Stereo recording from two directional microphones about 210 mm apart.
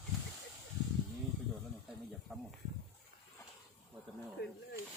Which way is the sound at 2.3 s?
Centre (ahead or behind).